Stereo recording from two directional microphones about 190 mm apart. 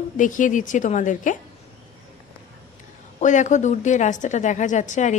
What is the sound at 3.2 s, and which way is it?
A woman's voice, 40° left (ahead or behind).